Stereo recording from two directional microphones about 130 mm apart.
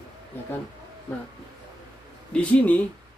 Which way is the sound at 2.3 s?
10° left (ahead or behind).